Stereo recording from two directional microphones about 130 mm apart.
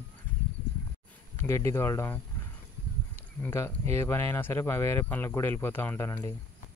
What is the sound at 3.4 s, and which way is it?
Speech, 20° left (ahead or behind).